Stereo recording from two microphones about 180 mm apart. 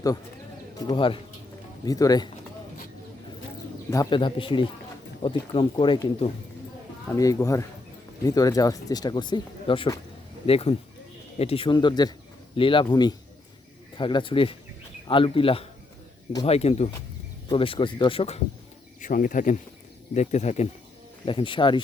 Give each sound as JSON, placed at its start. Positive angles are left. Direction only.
{"t": 0.9, "sound": "speech", "side_deg": 30}
{"t": 3.8, "sound": "speech", "side_deg": 20}
{"t": 18.9, "sound": "speech", "side_deg": 45}